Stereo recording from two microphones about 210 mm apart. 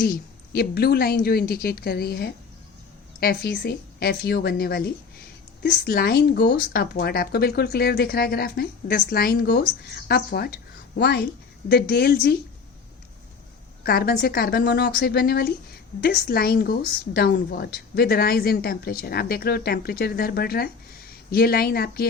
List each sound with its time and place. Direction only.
0.0 s a woman's voice: 45° left (ahead or behind)
13.8 s a woman's voice: 45° left (ahead or behind)